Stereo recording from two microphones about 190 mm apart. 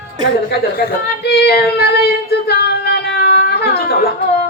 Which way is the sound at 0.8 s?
55° left (ahead or behind).